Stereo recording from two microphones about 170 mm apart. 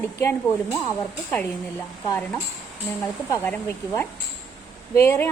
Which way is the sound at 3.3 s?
15° left (ahead or behind).